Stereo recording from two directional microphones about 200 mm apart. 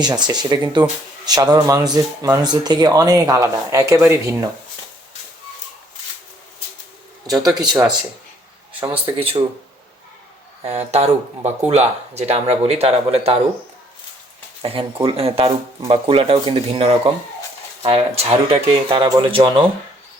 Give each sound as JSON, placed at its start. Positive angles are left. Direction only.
{"t": 0.0, "sound": "speech", "side_deg": -20}
{"t": 7.5, "sound": "speech", "side_deg": -20}
{"t": 9.1, "sound": "speech", "side_deg": -30}
{"t": 10.6, "sound": "speech", "side_deg": -35}
{"t": 14.6, "sound": "speech", "side_deg": -30}